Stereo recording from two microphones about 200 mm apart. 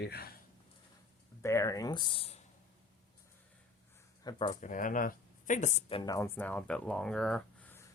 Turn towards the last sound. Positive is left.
turn(degrees=10)  # may be behind; listen again after turning